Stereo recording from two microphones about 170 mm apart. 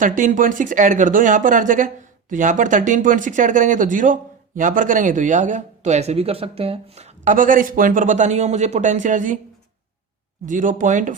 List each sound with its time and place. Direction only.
0.0 s speech: 50° right (ahead or behind)
10.4 s speech: 50° right (ahead or behind)